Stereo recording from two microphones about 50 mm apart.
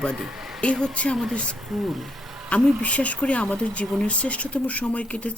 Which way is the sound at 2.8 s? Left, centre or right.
Left.